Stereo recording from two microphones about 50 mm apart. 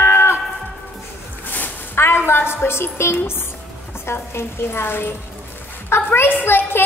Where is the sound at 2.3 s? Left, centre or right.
Left.